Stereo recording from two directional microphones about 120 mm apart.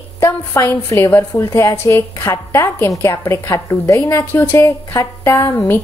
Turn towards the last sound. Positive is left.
turn(degrees=25)  # may be behind; listen again after turning